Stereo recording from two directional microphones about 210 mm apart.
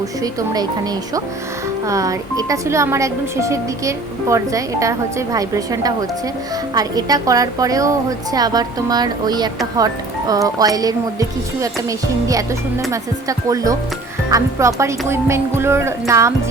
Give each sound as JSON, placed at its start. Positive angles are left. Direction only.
{"t": 0.2, "sound": "speech", "side_deg": -15}
{"t": 1.9, "sound": "speech", "side_deg": -15}